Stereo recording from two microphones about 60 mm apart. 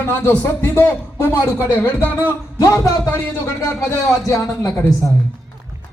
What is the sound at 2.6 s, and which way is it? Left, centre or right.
Speech, left.